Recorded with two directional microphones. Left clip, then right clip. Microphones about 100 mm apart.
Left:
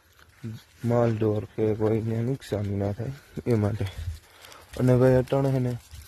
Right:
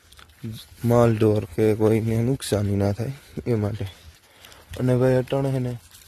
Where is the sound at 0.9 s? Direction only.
50° right (ahead or behind).